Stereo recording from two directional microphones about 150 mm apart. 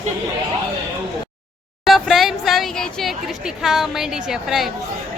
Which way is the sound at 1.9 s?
Centre (ahead or behind).